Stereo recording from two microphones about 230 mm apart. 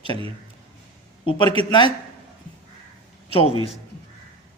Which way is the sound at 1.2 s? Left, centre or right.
Left.